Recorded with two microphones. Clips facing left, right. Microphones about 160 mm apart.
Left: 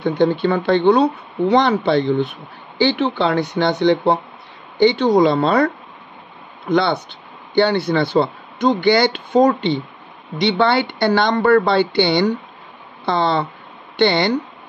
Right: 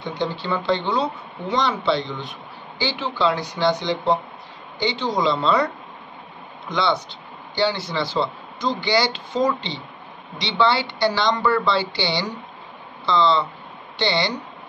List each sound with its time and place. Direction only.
0.0 s speech: 55° left (ahead or behind)
6.7 s speech: 55° left (ahead or behind)